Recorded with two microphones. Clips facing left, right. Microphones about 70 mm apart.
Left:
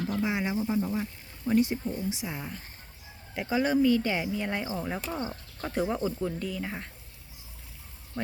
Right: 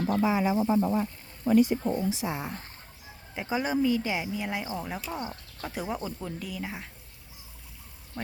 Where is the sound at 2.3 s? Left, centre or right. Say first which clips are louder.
Right 4 dB; right.